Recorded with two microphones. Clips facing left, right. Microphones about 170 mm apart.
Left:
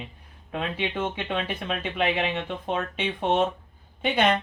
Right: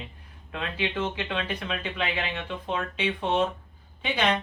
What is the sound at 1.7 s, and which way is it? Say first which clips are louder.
Speech: left 4 dB; 45° left (ahead or behind).